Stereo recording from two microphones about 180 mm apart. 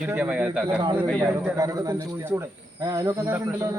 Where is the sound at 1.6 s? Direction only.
20° right (ahead or behind).